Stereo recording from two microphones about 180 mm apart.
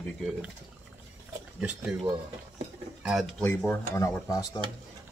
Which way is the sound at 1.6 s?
5° right (ahead or behind).